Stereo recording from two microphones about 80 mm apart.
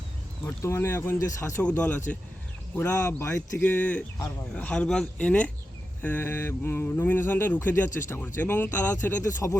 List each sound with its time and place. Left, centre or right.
0.4 s speech: left
1.8 s speech: centre
2.9 s speech: left
3.6 s speech: left
9.2 s speech: left